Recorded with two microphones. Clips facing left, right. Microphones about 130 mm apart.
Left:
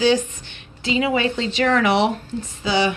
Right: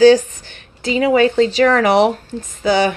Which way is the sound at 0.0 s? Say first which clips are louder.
Right 9 dB; 40° right (ahead or behind).